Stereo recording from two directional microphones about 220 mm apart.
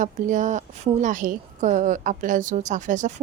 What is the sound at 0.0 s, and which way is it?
A woman's voice, 35° right (ahead or behind).